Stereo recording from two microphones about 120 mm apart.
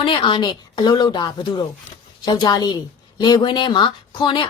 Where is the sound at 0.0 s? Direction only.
45° left (ahead or behind).